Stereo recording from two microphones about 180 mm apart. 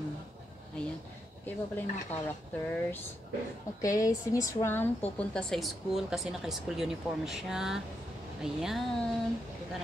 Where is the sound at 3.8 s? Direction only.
20° left (ahead or behind); by 9.1 s centre (ahead or behind).